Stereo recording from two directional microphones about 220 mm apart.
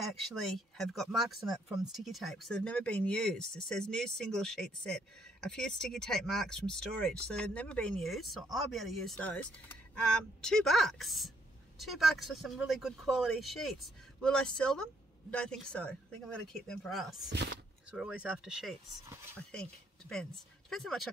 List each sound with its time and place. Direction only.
0.6 s speech: centre (ahead or behind)
17.3 s speech: 50° right (ahead or behind)
17.9 s speech: 5° right (ahead or behind)